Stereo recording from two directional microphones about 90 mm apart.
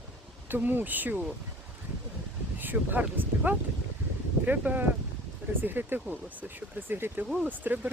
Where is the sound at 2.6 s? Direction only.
20° right (ahead or behind).